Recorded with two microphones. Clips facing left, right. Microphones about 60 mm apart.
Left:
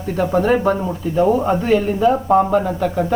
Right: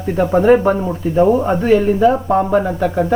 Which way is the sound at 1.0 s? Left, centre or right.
Right.